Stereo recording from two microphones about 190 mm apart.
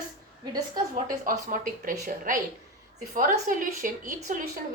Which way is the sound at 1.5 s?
45° right (ahead or behind).